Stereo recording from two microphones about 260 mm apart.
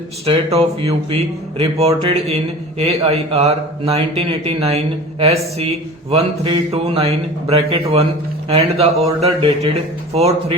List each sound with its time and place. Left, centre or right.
0.3 s speech: right